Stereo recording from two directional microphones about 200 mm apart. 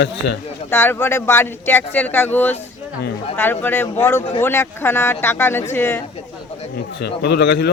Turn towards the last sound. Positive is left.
turn(degrees=60)  # may be behind; listen again after turning